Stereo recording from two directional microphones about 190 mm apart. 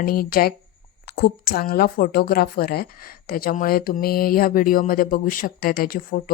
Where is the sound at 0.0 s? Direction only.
50° left (ahead or behind).